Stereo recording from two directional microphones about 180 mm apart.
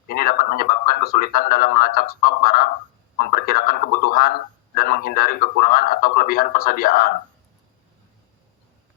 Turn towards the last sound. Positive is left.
turn(degrees=55)  # may be behind; listen again after turning